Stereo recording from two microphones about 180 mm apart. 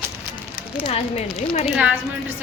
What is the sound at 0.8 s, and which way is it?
Speech, 30° left (ahead or behind).